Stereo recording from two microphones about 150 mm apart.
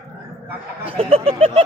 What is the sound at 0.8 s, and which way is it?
Speech, 40° right (ahead or behind).